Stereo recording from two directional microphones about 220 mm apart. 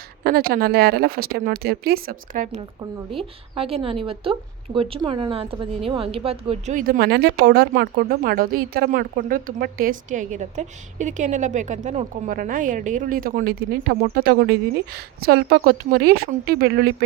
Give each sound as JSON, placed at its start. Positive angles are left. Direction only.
{"t": 0.3, "sound": "a woman's voice", "side_deg": -45}
{"t": 3.2, "sound": "a woman's voice", "side_deg": -25}